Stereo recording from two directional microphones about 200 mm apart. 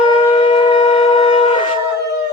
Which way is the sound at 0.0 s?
25° left (ahead or behind).